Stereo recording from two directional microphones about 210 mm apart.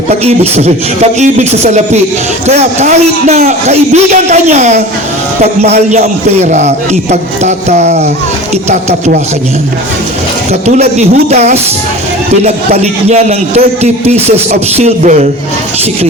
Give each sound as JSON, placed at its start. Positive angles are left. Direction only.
{"t": 0.3, "sound": "a man's voice", "side_deg": -30}
{"t": 10.5, "sound": "a man's voice", "side_deg": -30}
{"t": 12.7, "sound": "a man's voice", "side_deg": -30}